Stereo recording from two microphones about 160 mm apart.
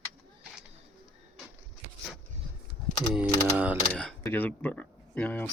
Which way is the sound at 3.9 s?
5° left (ahead or behind).